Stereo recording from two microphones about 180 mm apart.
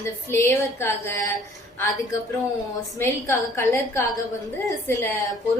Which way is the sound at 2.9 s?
15° left (ahead or behind).